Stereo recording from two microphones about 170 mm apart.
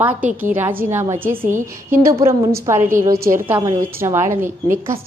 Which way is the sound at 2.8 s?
50° right (ahead or behind).